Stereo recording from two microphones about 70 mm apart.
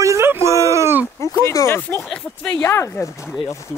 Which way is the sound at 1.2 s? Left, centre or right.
Left.